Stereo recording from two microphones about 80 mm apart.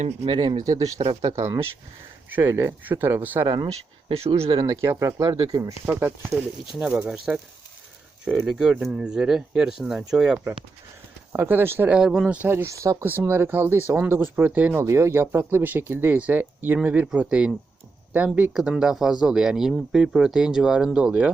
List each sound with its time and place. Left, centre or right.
0.3 s speech: right
0.6 s speech: right
2.3 s speech: right
3.4 s speech: right
4.6 s speech: right
5.8 s speech: right
6.7 s speech: centre
11.3 s speech: right
11.9 s speech: centre
12.5 s speech: right
13.1 s speech: right